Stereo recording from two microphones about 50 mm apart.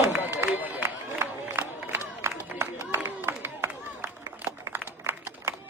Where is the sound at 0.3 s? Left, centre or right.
Right.